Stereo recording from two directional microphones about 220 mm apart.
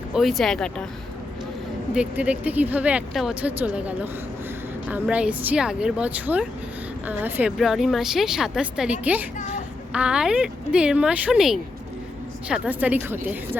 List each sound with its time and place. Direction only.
0.1 s speech: centre (ahead or behind)
2.0 s speech: 5° right (ahead or behind)